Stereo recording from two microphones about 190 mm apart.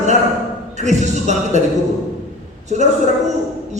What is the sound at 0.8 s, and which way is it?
Speech, 40° right (ahead or behind).